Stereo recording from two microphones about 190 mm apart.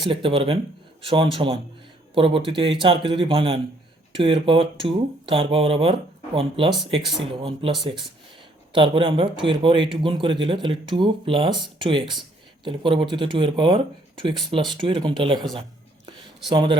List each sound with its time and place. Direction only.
0.1 s a man's voice: 30° right (ahead or behind)
16.5 s a man's voice: 25° right (ahead or behind)